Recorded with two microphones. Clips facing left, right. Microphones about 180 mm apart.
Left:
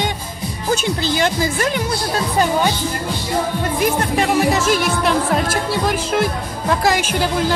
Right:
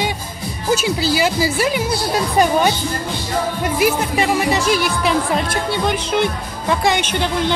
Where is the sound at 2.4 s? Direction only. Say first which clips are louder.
Right 2 dB; 20° right (ahead or behind).